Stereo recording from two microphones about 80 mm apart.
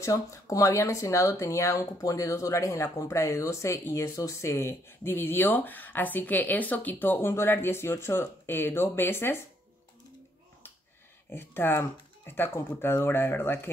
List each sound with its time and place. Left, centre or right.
0.0 s speech: left
11.2 s speech: left